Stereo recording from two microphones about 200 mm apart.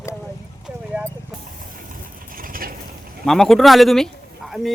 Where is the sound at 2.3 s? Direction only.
45° right (ahead or behind).